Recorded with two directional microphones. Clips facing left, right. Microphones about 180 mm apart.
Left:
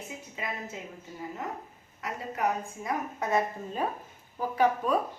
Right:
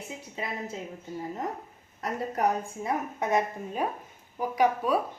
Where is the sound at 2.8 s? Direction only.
20° right (ahead or behind).